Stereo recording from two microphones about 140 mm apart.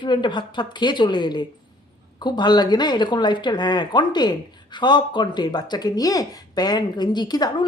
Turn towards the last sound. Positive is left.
turn(degrees=30)  # may be behind; listen again after turning